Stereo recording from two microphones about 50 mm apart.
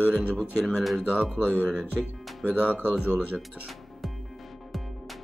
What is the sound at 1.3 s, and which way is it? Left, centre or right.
Speech, right.